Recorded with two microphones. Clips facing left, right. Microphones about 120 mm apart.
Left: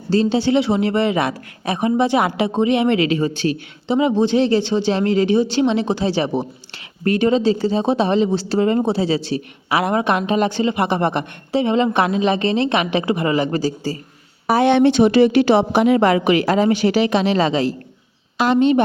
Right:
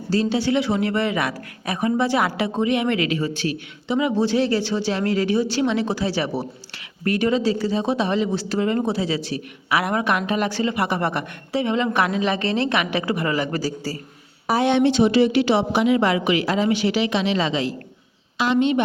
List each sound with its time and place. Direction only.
0.1 s a woman's voice: 25° left (ahead or behind)
14.4 s a woman's voice: 60° left (ahead or behind); by 18.8 s 35° left (ahead or behind)